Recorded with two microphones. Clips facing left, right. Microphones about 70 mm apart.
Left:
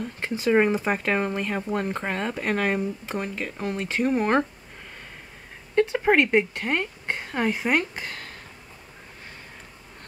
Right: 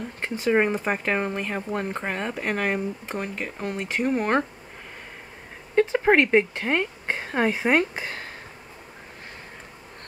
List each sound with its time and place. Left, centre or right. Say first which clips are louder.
0.0 s speech: even; centre
5.8 s speech: right 1 dB; centre